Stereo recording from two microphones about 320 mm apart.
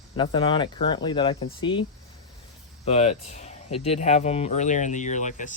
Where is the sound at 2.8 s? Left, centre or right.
Centre.